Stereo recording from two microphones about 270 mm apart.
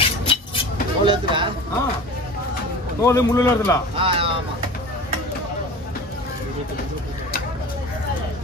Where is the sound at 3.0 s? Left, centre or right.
Centre.